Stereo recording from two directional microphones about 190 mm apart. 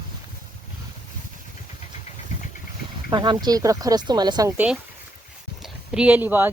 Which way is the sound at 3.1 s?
25° right (ahead or behind).